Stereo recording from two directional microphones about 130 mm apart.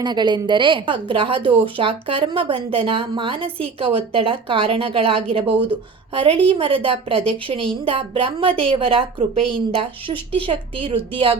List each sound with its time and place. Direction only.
0.0 s a woman's voice: 35° right (ahead or behind)